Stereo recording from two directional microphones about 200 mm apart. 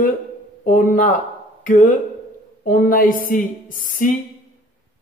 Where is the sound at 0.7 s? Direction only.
45° left (ahead or behind).